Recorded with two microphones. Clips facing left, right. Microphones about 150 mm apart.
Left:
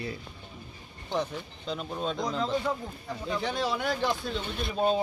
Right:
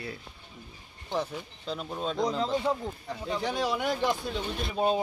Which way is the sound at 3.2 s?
10° right (ahead or behind).